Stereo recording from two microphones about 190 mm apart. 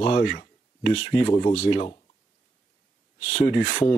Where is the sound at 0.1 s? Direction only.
45° left (ahead or behind).